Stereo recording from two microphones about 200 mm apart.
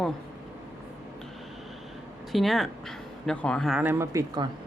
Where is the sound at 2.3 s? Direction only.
Centre (ahead or behind).